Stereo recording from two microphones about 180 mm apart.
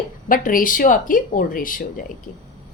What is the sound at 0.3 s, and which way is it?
Speech, 50° left (ahead or behind).